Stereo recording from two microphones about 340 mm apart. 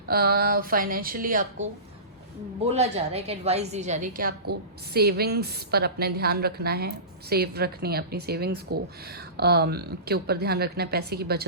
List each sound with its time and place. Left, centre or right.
0.1 s a woman's voice: right